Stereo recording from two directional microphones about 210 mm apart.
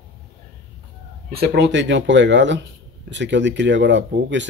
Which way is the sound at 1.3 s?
50° right (ahead or behind).